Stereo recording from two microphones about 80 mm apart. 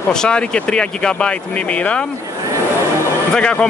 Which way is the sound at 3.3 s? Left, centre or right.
Centre.